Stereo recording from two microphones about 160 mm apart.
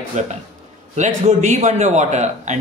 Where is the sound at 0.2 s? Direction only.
45° right (ahead or behind).